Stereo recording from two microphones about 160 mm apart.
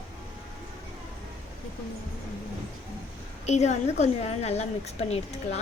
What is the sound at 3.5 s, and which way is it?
A woman's voice, 45° left (ahead or behind).